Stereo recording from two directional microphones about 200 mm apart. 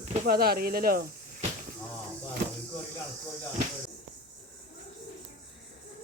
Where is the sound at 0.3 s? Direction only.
50° right (ahead or behind).